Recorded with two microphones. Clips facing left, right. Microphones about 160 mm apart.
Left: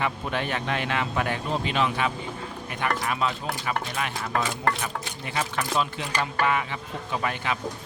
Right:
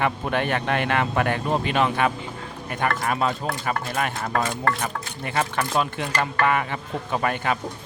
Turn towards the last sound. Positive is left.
turn(degrees=-50)  # may be behind; listen again after turning